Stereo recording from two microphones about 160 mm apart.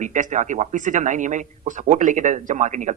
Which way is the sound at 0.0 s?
50° right (ahead or behind).